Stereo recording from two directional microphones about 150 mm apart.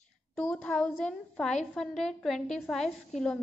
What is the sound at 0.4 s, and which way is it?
A woman's voice, 5° left (ahead or behind).